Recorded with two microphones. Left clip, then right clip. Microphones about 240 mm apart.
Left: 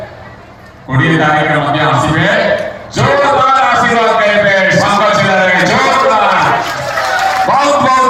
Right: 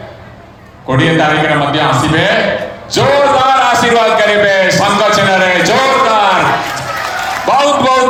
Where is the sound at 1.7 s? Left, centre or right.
Right.